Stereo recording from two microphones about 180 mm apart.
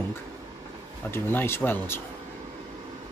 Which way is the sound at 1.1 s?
10° left (ahead or behind).